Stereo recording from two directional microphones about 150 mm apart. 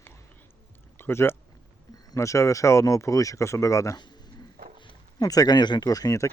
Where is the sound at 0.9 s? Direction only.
15° left (ahead or behind).